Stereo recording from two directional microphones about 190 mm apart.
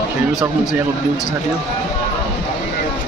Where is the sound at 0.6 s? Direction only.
20° left (ahead or behind).